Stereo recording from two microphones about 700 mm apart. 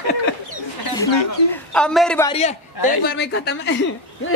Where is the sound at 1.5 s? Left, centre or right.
Centre.